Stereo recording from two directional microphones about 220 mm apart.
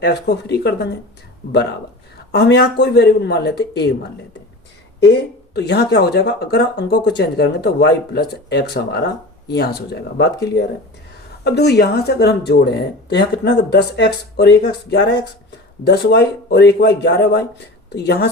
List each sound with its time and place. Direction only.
0.0 s speech: 50° left (ahead or behind)
2.3 s speech: 50° left (ahead or behind)
4.9 s speech: 50° left (ahead or behind)